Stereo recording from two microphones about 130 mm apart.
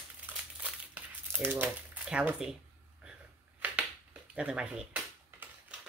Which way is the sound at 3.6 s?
10° right (ahead or behind).